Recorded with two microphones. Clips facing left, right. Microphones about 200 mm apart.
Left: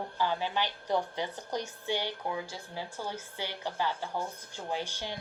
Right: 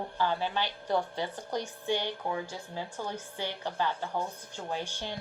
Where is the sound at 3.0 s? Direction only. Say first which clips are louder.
Right 2 dB; 10° left (ahead or behind).